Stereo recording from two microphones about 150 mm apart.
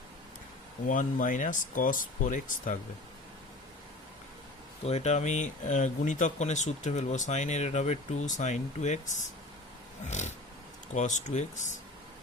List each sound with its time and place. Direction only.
0.9 s speech: 60° left (ahead or behind)
4.9 s speech: 50° left (ahead or behind)